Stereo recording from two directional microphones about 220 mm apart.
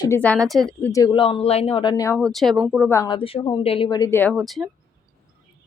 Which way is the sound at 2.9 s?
20° left (ahead or behind).